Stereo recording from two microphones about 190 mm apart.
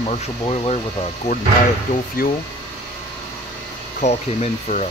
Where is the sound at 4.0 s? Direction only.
35° left (ahead or behind).